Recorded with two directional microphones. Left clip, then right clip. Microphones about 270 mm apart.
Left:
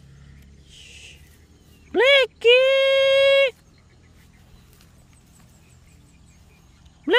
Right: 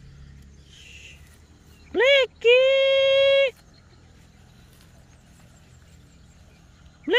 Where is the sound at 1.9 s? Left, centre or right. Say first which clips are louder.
Left 2 dB; left.